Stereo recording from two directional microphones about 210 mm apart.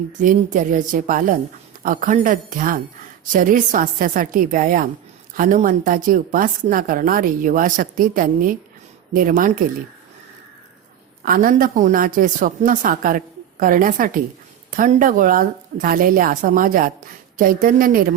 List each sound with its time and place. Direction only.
0.2 s a woman's voice: 40° right (ahead or behind)
11.3 s a woman's voice: 40° right (ahead or behind)